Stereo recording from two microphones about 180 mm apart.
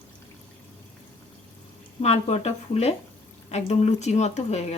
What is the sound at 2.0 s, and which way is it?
A woman's voice, 35° left (ahead or behind).